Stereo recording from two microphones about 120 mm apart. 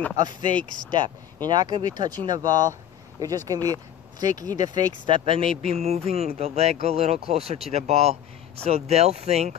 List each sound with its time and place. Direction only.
0.9 s speech: 40° right (ahead or behind)
5.7 s speech: 60° right (ahead or behind)